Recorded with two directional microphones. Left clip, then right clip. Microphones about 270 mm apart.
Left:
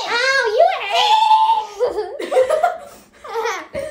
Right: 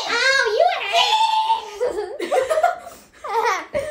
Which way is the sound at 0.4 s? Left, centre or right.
Left.